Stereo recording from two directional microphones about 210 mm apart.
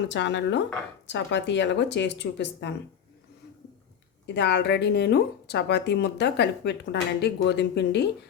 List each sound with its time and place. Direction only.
0.1 s speech: 55° left (ahead or behind)
4.4 s speech: 55° left (ahead or behind)